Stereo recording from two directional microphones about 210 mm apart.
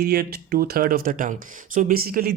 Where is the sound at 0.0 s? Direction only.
45° right (ahead or behind).